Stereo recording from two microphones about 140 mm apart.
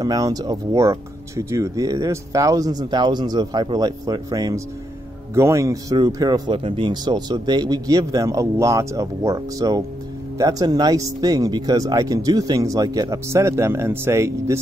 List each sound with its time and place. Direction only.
0.0 s speech: 25° right (ahead or behind)